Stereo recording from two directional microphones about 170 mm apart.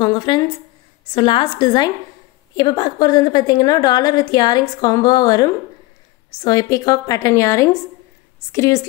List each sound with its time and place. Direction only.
0.0 s a woman's voice: 25° left (ahead or behind)